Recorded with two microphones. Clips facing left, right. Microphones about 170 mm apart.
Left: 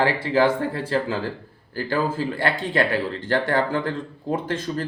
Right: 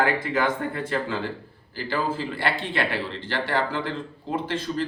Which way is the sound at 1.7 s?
45° left (ahead or behind).